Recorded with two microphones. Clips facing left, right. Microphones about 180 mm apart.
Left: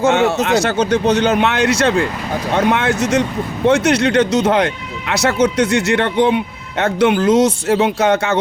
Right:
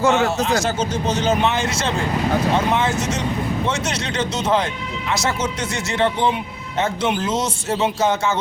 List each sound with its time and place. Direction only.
0.4 s speech: 65° left (ahead or behind)